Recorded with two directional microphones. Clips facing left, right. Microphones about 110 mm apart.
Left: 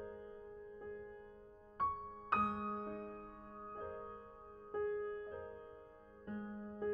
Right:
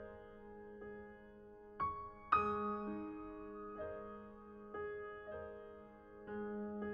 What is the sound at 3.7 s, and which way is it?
Music, 35° left (ahead or behind).